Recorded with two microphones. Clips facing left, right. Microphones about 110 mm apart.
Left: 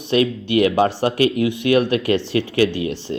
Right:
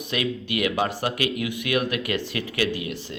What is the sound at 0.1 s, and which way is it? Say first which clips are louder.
Speech: left 10 dB; 30° left (ahead or behind).